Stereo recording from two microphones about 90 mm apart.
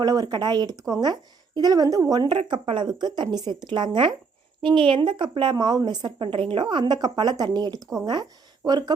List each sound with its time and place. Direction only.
0.0 s a woman's voice: 45° right (ahead or behind)
2.3 s speech: 70° right (ahead or behind); by 6.2 s 50° right (ahead or behind)
6.2 s a woman's voice: 75° right (ahead or behind); by 8.8 s 50° right (ahead or behind)